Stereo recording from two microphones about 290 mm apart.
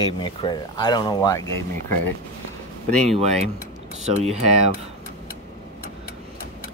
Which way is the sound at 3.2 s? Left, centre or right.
Right.